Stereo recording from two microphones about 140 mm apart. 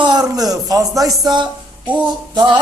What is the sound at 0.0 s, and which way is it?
A man's voice, 30° right (ahead or behind).